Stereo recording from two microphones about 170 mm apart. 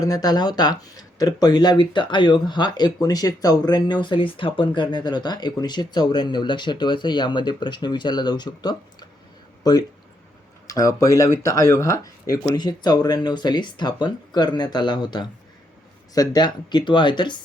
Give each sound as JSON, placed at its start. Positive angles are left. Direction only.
{"t": 0.0, "sound": "speech", "side_deg": 20}